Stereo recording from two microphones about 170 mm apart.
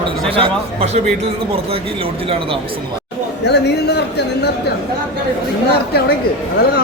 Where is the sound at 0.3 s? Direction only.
35° right (ahead or behind).